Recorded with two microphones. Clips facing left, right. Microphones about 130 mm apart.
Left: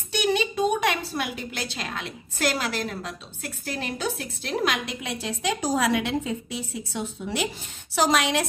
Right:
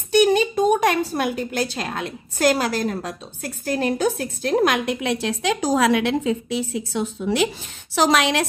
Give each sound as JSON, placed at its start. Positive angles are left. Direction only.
{"t": 0.1, "sound": "a woman's voice", "side_deg": -45}